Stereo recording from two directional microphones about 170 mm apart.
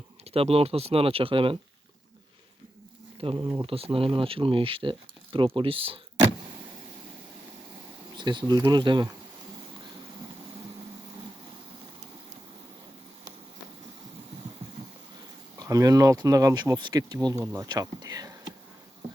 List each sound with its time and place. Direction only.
0.3 s speech: 35° right (ahead or behind)
3.2 s speech: 30° right (ahead or behind)
8.1 s speech: 25° right (ahead or behind)
15.5 s speech: 20° right (ahead or behind)